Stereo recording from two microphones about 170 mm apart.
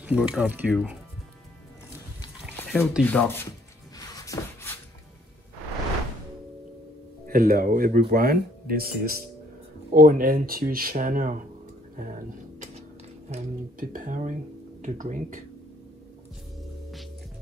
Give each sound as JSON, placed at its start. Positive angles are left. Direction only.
{"t": 0.0, "sound": "speech", "side_deg": -5}
{"t": 2.5, "sound": "a sound", "side_deg": 10}
{"t": 3.0, "sound": "rub", "side_deg": 10}
{"t": 4.1, "sound": "a sound", "side_deg": 20}
{"t": 7.2, "sound": "speech", "side_deg": -60}
{"t": 13.3, "sound": "speech", "side_deg": -45}